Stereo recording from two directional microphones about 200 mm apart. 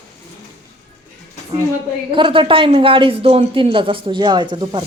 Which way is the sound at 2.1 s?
25° right (ahead or behind).